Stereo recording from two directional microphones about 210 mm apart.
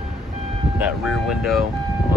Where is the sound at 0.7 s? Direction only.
5° right (ahead or behind).